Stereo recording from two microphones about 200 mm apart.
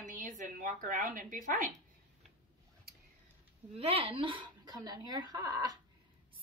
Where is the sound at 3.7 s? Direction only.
30° right (ahead or behind).